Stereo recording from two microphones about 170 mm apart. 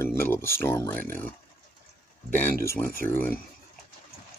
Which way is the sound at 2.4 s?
15° left (ahead or behind).